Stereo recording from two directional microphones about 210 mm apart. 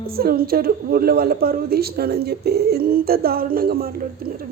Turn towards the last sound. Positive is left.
turn(degrees=-45)  # may be behind; listen again after turning